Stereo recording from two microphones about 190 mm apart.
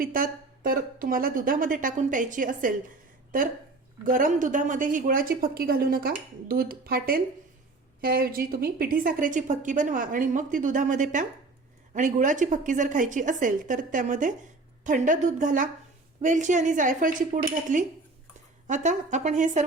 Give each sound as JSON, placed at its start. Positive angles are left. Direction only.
{"t": 0.0, "sound": "a woman's voice", "side_deg": -45}